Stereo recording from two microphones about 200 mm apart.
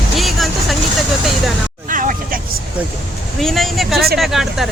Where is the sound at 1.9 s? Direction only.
45° right (ahead or behind).